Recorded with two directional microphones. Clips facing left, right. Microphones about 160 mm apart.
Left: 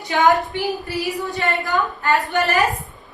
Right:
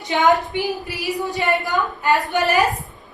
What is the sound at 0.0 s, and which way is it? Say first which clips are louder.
Speech: even; 20° right (ahead or behind).